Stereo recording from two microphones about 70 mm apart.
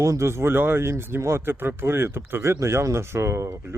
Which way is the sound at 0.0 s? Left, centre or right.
Right.